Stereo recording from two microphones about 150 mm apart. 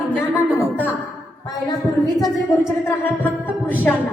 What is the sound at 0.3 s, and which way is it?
Music, 15° right (ahead or behind).